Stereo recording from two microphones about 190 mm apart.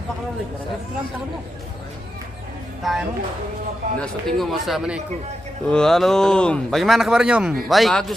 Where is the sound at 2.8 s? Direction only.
Centre (ahead or behind).